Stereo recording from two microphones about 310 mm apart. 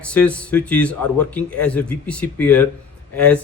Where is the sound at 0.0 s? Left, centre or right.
Centre.